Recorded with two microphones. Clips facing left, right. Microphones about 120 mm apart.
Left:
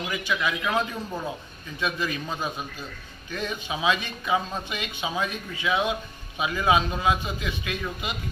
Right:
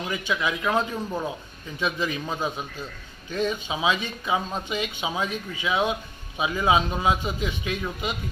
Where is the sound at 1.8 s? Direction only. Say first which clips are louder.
Right 1 dB; 20° right (ahead or behind).